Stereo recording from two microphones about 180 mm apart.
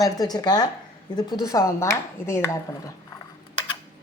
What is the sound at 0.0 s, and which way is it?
Speech, 20° left (ahead or behind).